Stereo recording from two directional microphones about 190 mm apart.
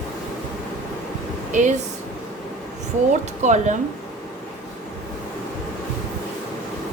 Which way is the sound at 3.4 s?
40° right (ahead or behind).